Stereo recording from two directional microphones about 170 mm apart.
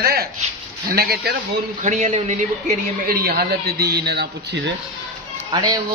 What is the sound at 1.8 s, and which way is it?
A man's voice, 45° right (ahead or behind).